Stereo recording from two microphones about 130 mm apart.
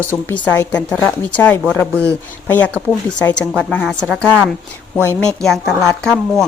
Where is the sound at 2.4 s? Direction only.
15° left (ahead or behind).